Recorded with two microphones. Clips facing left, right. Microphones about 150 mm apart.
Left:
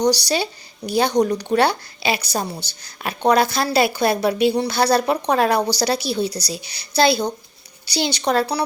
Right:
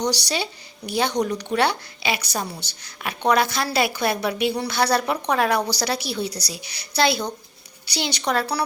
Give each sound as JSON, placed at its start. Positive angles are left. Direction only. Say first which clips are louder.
{"t": 0.0, "sound": "a woman's voice", "louder": "left 6 dB", "side_deg": 35}